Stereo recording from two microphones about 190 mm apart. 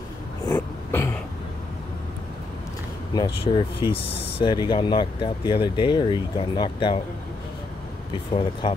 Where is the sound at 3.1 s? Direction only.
25° left (ahead or behind).